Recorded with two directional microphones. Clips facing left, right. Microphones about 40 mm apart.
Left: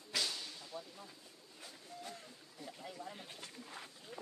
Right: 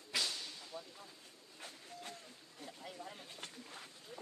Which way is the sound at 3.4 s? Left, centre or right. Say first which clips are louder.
Right 2 dB; right.